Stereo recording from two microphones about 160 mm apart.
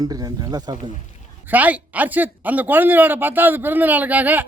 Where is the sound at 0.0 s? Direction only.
25° right (ahead or behind).